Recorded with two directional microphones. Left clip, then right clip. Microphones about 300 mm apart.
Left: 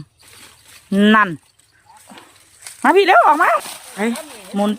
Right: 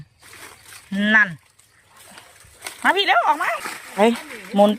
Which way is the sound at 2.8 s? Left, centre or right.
Centre.